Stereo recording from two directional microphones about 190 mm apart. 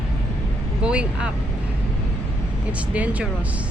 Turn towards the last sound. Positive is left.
turn(degrees=-5)  # may be behind; listen again after turning